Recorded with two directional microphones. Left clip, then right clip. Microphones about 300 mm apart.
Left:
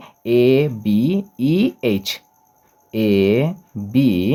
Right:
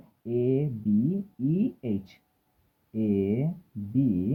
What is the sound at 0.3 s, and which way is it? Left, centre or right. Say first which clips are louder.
Speech: left 13 dB; left.